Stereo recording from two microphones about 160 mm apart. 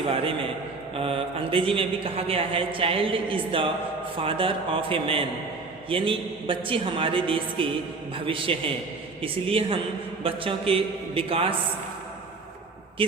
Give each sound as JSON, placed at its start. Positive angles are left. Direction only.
{"t": 0.9, "sound": "speech", "side_deg": -35}
{"t": 13.0, "sound": "speech", "side_deg": -35}